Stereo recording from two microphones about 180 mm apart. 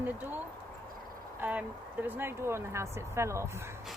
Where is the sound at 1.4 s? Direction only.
10° right (ahead or behind).